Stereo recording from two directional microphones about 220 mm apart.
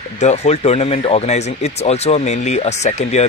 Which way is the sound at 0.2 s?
30° left (ahead or behind).